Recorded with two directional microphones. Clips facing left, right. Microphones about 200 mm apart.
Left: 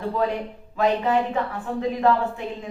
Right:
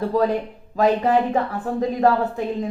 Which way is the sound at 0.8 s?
40° right (ahead or behind).